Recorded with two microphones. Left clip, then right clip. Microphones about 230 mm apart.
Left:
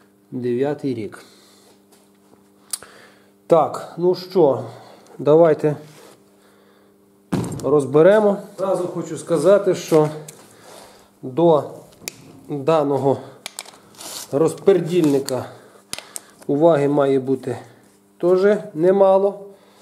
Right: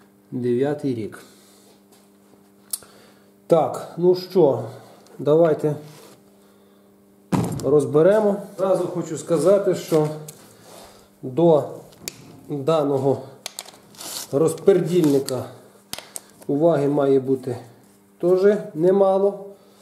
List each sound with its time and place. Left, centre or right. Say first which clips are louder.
0.4 s speech: even; centre
3.4 s speech: left 3 dB; centre
7.2 s speech: left 1 dB; centre
8.5 s speech: right 1 dB; centre
9.5 s speech: left 4 dB; centre
10.0 s a sound: left 3 dB; centre
16.4 s speech: left 4 dB; left
17.4 s speech: left 2 dB; centre